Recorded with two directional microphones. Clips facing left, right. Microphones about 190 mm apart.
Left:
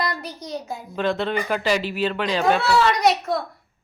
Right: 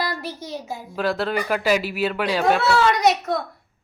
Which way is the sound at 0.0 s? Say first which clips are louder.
Even; 5° right (ahead or behind).